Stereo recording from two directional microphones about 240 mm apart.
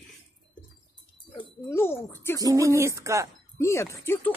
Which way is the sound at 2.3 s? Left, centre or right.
Centre.